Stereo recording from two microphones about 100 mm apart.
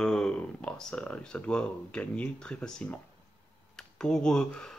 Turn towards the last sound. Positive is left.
turn(degrees=5)  # may be behind; listen again after turning